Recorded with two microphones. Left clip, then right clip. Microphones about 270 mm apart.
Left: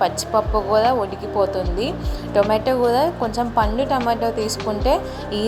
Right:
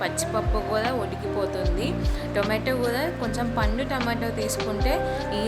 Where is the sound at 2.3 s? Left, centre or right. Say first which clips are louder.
Left 8 dB; centre.